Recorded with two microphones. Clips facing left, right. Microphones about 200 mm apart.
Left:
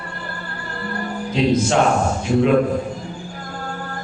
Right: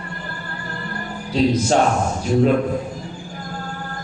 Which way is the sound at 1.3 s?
40° right (ahead or behind).